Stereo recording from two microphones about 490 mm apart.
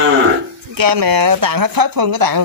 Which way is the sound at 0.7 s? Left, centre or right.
Right.